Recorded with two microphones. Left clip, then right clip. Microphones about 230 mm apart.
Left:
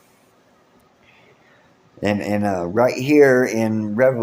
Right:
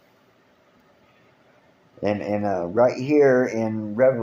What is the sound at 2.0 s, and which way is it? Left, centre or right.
Speech, left.